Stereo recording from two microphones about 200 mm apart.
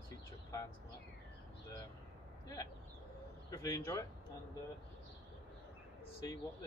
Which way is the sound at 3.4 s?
15° left (ahead or behind).